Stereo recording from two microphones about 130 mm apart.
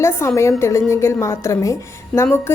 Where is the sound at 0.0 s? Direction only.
20° left (ahead or behind).